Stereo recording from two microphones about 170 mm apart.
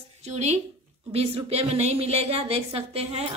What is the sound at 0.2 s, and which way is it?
A woman's voice, 40° right (ahead or behind).